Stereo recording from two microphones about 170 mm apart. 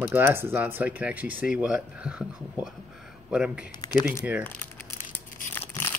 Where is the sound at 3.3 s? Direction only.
5° right (ahead or behind).